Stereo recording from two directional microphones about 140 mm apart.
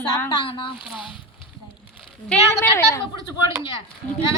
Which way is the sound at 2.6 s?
20° left (ahead or behind).